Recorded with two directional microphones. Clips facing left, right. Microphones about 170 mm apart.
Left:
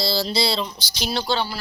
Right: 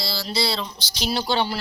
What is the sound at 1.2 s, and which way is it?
Speech, 15° right (ahead or behind).